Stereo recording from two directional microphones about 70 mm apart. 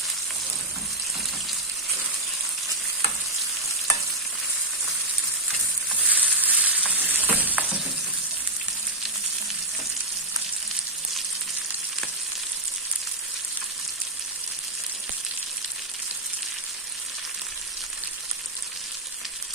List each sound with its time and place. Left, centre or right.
6.1 s frying: right